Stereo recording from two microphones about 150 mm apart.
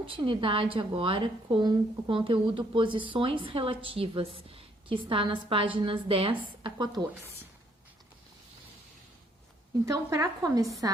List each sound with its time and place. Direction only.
0.0 s a woman's voice: 35° right (ahead or behind)
9.8 s a woman's voice: 20° right (ahead or behind)